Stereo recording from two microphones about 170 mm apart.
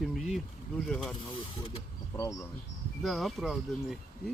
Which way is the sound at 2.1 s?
15° left (ahead or behind).